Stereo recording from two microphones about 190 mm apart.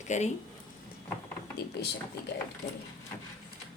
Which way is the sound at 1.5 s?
60° left (ahead or behind).